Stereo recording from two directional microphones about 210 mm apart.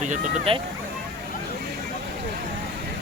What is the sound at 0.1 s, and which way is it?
Speech, 25° right (ahead or behind).